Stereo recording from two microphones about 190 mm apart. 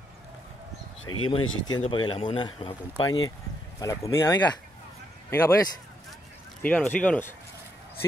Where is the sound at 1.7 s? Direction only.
25° left (ahead or behind).